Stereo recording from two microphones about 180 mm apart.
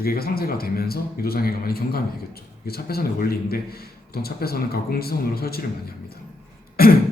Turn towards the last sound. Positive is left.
turn(degrees=55)  # may be behind; listen again after turning